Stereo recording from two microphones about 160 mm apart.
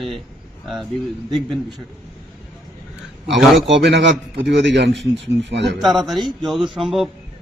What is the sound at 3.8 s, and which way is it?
Speech, 90° right.